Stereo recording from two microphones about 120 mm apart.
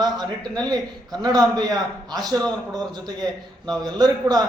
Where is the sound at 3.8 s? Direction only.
35° right (ahead or behind).